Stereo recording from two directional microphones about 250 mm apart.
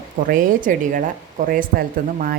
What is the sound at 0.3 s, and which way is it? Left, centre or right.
A woman's voice, right.